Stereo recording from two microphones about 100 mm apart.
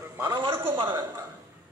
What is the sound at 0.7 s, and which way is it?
Speech, 65° right (ahead or behind).